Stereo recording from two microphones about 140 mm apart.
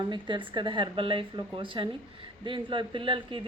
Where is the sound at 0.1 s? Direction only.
35° right (ahead or behind).